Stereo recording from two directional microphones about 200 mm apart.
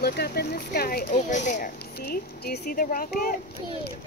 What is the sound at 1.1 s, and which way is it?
Speech, 35° left (ahead or behind).